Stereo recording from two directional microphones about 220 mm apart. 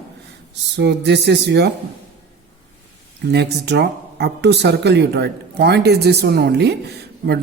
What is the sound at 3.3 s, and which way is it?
Speech, 50° right (ahead or behind).